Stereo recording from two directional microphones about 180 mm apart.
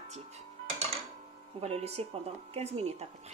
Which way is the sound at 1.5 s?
35° right (ahead or behind).